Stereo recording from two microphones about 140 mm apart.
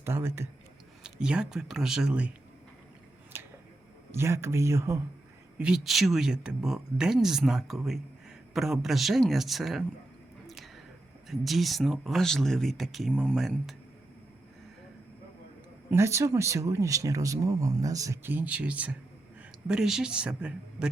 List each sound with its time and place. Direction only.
0.0 s speech: 15° right (ahead or behind)
1.0 s speech: 5° right (ahead or behind)
3.3 s finger snapping: 15° right (ahead or behind)
4.1 s speech: 20° right (ahead or behind)
5.5 s speech: 5° right (ahead or behind)
10.4 s a sound: centre (ahead or behind)
11.3 s speech: centre (ahead or behind)
15.9 s speech: 20° right (ahead or behind)